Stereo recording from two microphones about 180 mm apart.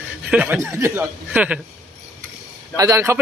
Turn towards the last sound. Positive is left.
turn(degrees=-15)  # may be behind; listen again after turning